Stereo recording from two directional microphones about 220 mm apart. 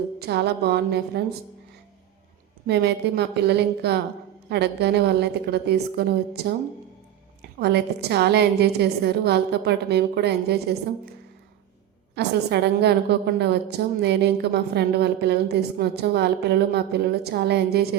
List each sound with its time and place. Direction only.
0.2 s a woman's voice: 50° right (ahead or behind)
2.6 s a woman's voice: 50° right (ahead or behind)
7.6 s a woman's voice: 50° right (ahead or behind)
12.1 s a woman's voice: 50° right (ahead or behind)